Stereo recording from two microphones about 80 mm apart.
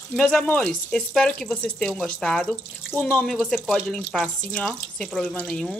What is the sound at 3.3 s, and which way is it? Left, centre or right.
Speech, centre.